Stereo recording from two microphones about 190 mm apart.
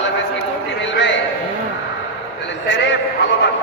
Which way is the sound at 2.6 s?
70° left (ahead or behind).